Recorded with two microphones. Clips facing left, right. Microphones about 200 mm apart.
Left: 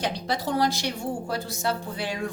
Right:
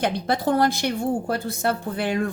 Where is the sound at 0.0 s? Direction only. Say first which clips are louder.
Right 5 dB; 55° right (ahead or behind).